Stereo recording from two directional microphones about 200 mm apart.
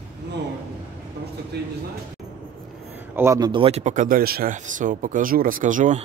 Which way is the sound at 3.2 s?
15° right (ahead or behind).